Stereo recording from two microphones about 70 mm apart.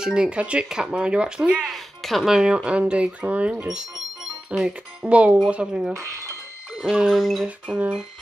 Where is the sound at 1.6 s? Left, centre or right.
Centre.